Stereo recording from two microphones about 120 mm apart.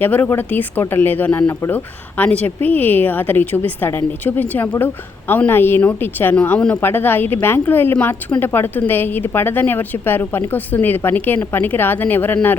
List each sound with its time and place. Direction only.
0.0 s speech: 15° left (ahead or behind)